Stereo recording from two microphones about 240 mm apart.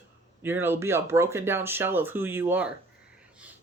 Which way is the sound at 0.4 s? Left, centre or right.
Centre.